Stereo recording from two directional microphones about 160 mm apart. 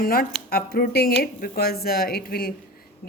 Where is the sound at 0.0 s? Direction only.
65° left (ahead or behind).